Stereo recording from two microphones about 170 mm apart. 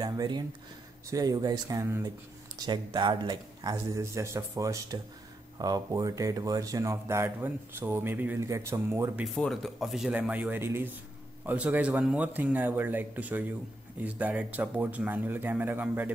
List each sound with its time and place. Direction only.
0.0 s a sound: 25° right (ahead or behind)
1.1 s speech: 20° right (ahead or behind)
9.2 s speech: centre (ahead or behind)